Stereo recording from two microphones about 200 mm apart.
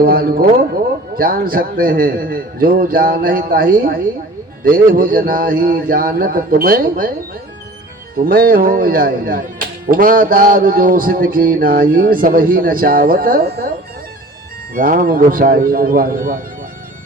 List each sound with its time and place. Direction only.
0.0 s speech: 45° right (ahead or behind)
8.1 s speech: 45° right (ahead or behind)
14.8 s speech: 45° right (ahead or behind)